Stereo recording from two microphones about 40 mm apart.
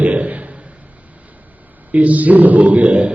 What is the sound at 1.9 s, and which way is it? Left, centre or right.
A man's voice, right.